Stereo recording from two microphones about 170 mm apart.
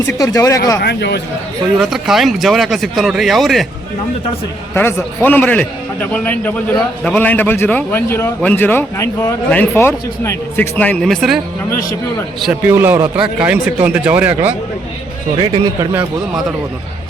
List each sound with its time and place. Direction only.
0.2 s speech: 20° left (ahead or behind)
0.8 s speech: 75° left (ahead or behind)
1.8 s speech: centre (ahead or behind)
4.7 s a man's voice: 10° left (ahead or behind)
12.6 s speech: 10° right (ahead or behind)
15.4 s speech: 30° right (ahead or behind)